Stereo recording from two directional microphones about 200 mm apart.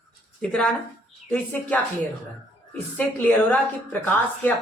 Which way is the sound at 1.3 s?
5° left (ahead or behind).